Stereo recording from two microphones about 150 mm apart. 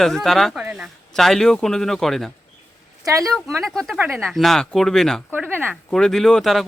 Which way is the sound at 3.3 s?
Centre (ahead or behind).